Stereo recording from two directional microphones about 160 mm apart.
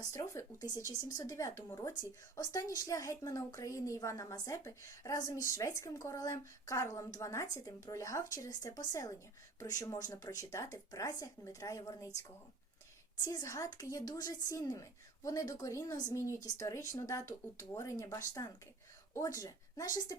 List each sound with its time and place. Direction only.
0.0 s a woman's voice: 20° left (ahead or behind)
13.2 s a woman's voice: 20° left (ahead or behind)